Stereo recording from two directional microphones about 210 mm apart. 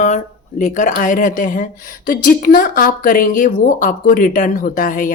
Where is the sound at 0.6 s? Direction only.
40° left (ahead or behind).